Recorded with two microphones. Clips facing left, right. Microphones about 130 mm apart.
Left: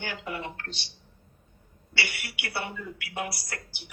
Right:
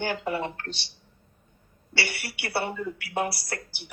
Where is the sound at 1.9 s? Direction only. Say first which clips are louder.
Right 3 dB; 35° right (ahead or behind).